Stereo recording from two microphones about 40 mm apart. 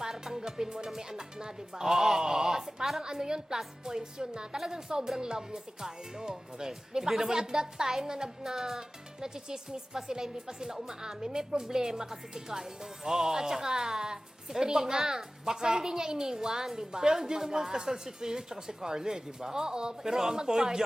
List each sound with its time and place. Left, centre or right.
0.0 s speech: centre